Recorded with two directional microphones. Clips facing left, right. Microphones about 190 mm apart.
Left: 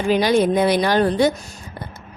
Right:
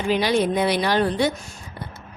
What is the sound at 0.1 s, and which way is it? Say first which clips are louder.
A woman's voice: left 4 dB; 45° left (ahead or behind).